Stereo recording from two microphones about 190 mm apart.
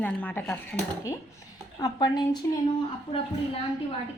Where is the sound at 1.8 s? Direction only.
20° left (ahead or behind).